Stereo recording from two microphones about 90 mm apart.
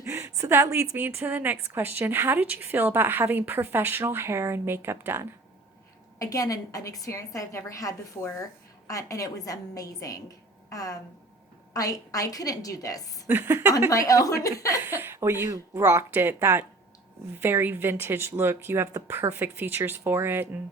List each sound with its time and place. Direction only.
0.0 s a sound: 35° right (ahead or behind)
0.9 s a woman's voice: 20° right (ahead or behind)
6.1 s a woman's voice: 40° left (ahead or behind)
13.2 s a woman's voice: 25° right (ahead or behind)
13.9 s a woman's voice: 40° left (ahead or behind)
14.8 s a woman's voice: 25° right (ahead or behind)